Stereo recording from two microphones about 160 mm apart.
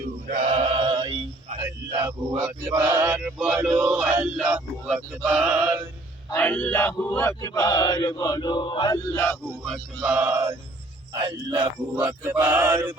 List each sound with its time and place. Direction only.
0.3 s a sound: 50° right (ahead or behind); by 2.1 s 20° right (ahead or behind)
2.6 s male singing: 15° right (ahead or behind)
6.3 s chant: 10° left (ahead or behind)
9.7 s male singing: 10° right (ahead or behind)
11.1 s male singing: 25° right (ahead or behind)